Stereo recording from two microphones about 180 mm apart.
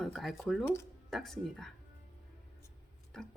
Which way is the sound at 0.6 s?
15° left (ahead or behind).